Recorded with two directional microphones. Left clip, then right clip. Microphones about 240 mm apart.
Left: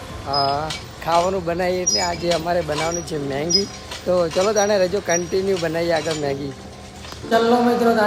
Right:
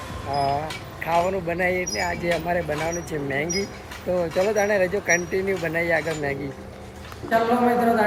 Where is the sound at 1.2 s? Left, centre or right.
Centre.